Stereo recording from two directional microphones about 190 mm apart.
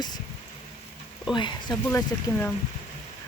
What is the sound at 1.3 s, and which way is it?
Speech, 20° left (ahead or behind).